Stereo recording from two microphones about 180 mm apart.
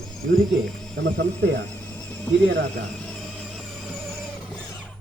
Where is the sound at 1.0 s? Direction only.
75° right (ahead or behind).